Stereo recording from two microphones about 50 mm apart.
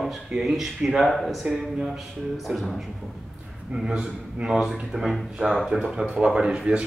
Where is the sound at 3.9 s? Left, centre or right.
Centre.